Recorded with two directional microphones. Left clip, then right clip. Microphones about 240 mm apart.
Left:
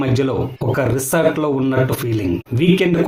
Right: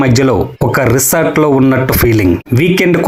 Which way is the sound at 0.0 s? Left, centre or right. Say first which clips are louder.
Right 8 dB; right.